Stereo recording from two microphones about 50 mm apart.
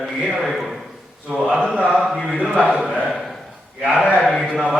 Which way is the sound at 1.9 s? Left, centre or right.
Centre.